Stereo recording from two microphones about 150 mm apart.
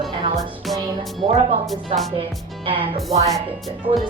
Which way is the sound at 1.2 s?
40° right (ahead or behind).